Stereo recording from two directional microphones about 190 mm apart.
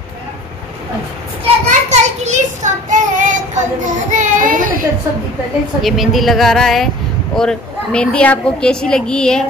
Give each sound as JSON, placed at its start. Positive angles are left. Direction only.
{"t": 1.4, "sound": "child singing", "side_deg": -40}
{"t": 5.8, "sound": "a woman's voice", "side_deg": 0}